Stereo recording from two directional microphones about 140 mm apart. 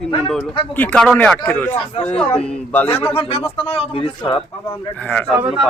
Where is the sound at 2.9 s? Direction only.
40° left (ahead or behind).